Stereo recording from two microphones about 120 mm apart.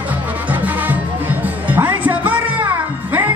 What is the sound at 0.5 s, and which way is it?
Music, 15° right (ahead or behind).